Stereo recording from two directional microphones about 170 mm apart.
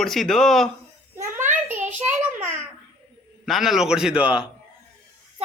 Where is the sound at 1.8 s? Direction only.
10° right (ahead or behind).